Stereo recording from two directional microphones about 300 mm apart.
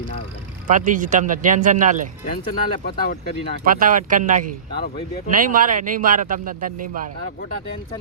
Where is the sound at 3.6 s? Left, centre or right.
Right.